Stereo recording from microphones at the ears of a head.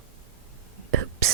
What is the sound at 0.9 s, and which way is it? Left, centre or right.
Whispering, right.